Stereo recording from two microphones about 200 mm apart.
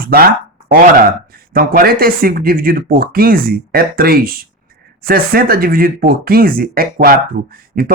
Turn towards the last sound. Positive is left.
turn(degrees=-45)  # may be behind; listen again after turning